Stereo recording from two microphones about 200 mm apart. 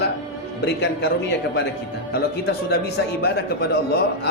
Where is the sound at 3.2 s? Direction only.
55° left (ahead or behind).